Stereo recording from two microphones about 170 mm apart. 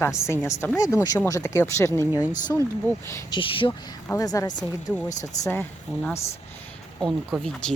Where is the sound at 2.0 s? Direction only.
10° right (ahead or behind).